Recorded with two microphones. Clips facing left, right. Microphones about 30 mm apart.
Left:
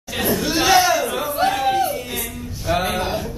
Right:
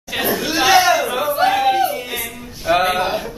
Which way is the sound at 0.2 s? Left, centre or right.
Centre.